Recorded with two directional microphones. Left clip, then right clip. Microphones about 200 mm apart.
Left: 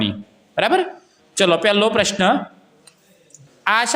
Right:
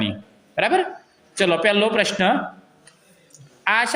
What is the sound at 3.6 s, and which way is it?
Speech, 30° left (ahead or behind).